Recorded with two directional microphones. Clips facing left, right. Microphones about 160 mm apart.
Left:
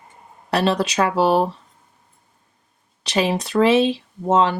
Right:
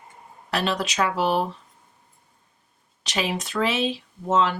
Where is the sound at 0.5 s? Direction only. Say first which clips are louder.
Left 6 dB; 35° left (ahead or behind).